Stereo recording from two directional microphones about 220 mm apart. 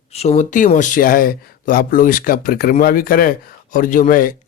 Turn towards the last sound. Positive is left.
turn(degrees=35)  # may be behind; listen again after turning